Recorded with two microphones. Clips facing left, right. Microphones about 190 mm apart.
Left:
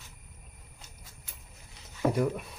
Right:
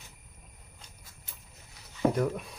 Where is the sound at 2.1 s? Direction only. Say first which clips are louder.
Left 1 dB; 5° left (ahead or behind).